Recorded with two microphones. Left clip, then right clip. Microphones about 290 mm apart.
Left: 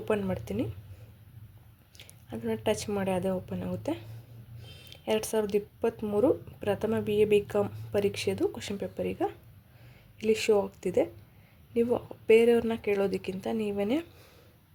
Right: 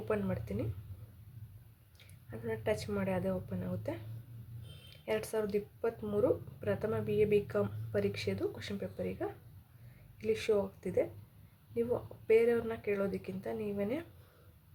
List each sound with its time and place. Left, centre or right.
0.1 s speech: left
2.5 s speech: left